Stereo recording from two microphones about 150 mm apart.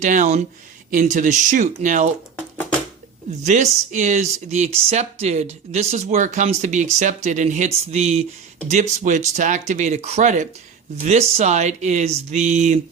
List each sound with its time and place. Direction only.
0.0 s speech: 55° right (ahead or behind)
3.4 s speech: 50° right (ahead or behind)